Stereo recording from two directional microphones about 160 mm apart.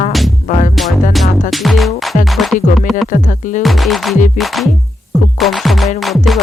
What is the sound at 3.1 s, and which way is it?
Music, 50° left (ahead or behind).